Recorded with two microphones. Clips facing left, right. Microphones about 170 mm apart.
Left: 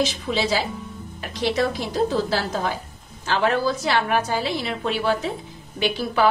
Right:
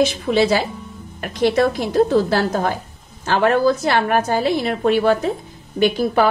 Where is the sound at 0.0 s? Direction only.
55° right (ahead or behind).